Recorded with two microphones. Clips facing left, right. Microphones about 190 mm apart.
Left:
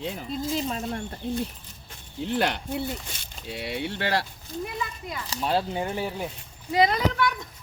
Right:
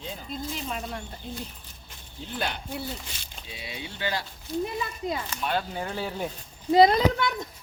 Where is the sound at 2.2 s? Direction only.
80° left.